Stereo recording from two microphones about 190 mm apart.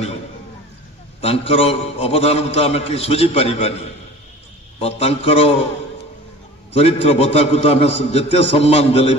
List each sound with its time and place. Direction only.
1.2 s a man's voice: 30° left (ahead or behind)
4.7 s a man's voice: 30° left (ahead or behind)
6.7 s a man's voice: 30° left (ahead or behind)